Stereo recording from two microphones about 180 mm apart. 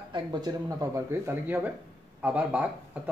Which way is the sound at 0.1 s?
25° right (ahead or behind).